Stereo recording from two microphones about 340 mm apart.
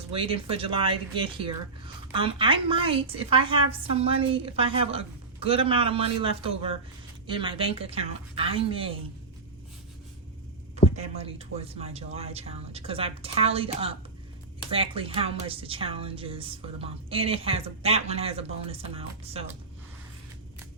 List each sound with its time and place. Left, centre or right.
0.1 s speech: centre
10.9 s speech: centre